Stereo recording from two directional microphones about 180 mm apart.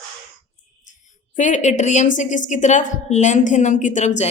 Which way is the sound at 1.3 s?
40° left (ahead or behind).